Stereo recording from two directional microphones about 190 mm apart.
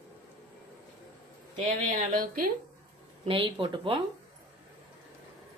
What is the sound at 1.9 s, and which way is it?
Speech, 45° right (ahead or behind).